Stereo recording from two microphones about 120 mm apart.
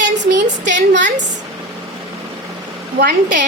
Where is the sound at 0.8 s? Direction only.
90° right.